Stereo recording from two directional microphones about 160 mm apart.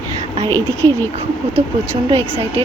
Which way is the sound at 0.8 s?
15° left (ahead or behind).